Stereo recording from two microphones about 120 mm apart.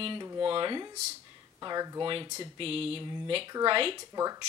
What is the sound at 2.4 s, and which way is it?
Speech, 50° right (ahead or behind).